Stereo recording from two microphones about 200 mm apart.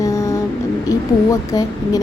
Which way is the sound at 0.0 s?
15° left (ahead or behind).